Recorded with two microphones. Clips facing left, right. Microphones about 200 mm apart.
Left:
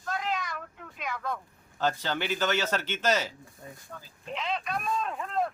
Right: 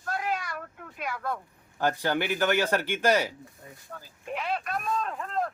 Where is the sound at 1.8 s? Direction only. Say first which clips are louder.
Right 3 dB; 15° right (ahead or behind).